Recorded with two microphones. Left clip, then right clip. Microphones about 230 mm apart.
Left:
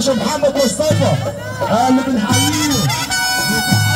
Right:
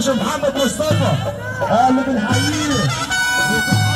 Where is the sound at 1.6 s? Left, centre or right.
Left.